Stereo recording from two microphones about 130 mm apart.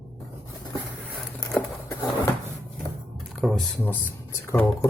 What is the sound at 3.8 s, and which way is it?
Speech, 20° left (ahead or behind).